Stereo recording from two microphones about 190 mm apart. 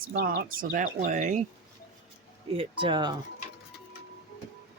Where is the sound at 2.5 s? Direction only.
25° right (ahead or behind).